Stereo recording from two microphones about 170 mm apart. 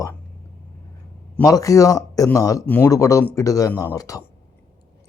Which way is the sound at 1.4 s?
20° left (ahead or behind).